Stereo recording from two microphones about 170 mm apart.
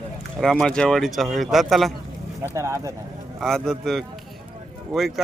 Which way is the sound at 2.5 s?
20° right (ahead or behind).